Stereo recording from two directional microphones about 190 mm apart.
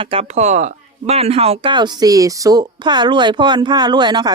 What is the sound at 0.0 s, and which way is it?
Speech, 30° right (ahead or behind).